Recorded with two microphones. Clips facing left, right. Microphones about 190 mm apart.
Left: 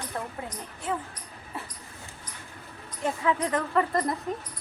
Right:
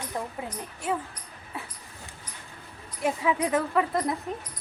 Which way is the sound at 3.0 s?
10° right (ahead or behind).